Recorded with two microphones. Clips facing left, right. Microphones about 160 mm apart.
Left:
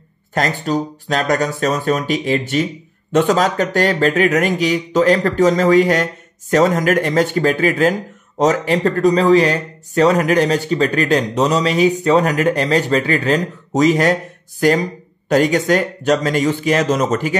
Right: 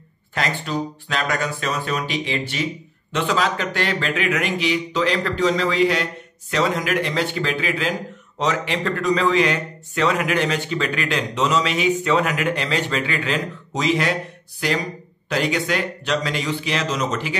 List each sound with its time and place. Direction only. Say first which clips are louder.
0.3 s a man's voice: left 6 dB; 40° left (ahead or behind)